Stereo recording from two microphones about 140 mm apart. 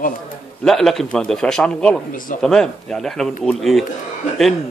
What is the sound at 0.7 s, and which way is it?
Speech, centre (ahead or behind).